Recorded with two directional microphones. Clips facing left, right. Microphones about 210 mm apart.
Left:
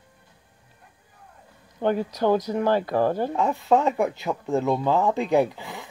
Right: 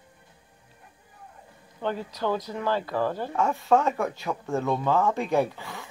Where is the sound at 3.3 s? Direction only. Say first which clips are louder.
Left 2 dB; 15° left (ahead or behind).